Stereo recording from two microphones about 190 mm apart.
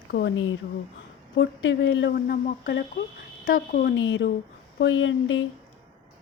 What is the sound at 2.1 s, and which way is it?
Speech, 50° left (ahead or behind).